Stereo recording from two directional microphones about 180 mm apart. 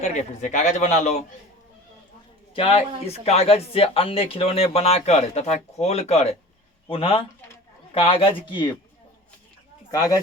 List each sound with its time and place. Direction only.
0.0 s speech: 40° left (ahead or behind)
2.6 s speech: 30° left (ahead or behind)
9.9 s speech: 20° left (ahead or behind)